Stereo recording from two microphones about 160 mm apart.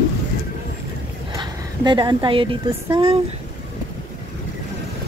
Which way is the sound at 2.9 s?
35° right (ahead or behind).